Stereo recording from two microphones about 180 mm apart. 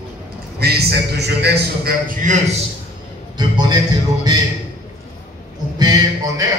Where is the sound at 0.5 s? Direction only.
65° right (ahead or behind); by 2.4 s 45° right (ahead or behind).